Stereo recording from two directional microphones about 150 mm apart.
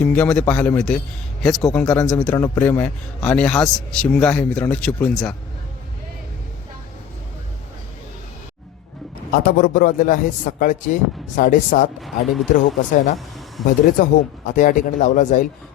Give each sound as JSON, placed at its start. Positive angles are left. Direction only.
{"t": 0.0, "sound": "a man's voice", "side_deg": 10}
{"t": 9.3, "sound": "a man's voice", "side_deg": 70}
{"t": 12.0, "sound": "speech", "side_deg": 0}
{"t": 14.0, "sound": "speech", "side_deg": 60}